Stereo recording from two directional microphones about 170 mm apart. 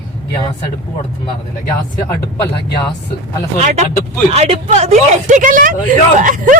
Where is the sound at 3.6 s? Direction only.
40° right (ahead or behind).